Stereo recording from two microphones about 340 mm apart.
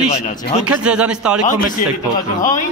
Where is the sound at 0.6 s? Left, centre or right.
Centre.